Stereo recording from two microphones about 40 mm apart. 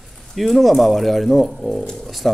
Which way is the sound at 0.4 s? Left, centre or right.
Centre.